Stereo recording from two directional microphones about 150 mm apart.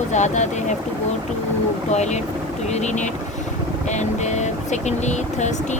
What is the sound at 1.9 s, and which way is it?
Speech, 50° left (ahead or behind).